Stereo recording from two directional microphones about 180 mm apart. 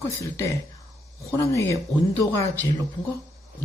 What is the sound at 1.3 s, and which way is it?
Speech, 15° left (ahead or behind).